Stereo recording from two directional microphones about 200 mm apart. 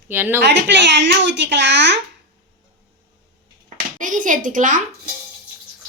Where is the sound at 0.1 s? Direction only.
10° right (ahead or behind).